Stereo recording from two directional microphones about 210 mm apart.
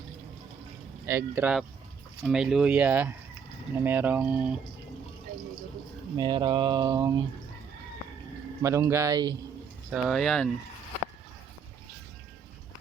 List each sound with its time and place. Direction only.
1.0 s speech: 10° right (ahead or behind)
6.1 s mantra: 20° right (ahead or behind)
8.6 s speech: 15° right (ahead or behind)
9.9 s speech: centre (ahead or behind)